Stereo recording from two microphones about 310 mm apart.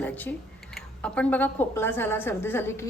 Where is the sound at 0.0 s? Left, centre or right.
Centre.